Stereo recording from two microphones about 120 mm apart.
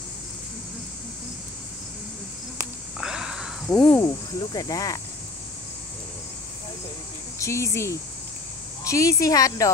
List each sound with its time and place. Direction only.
3.0 s a sound: 5° right (ahead or behind)
4.0 s speech: 35° left (ahead or behind)
7.3 s speech: 25° left (ahead or behind)